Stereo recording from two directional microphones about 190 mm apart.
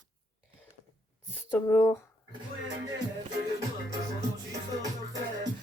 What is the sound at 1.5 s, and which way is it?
Speech, 15° left (ahead or behind).